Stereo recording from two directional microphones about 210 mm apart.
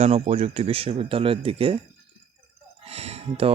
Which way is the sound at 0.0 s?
30° right (ahead or behind).